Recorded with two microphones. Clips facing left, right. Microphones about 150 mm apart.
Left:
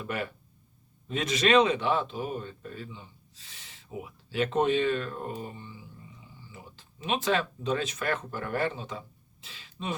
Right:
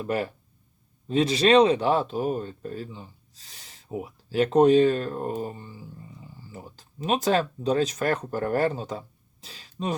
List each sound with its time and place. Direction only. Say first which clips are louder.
0.0 s speech: right 6 dB; 35° right (ahead or behind)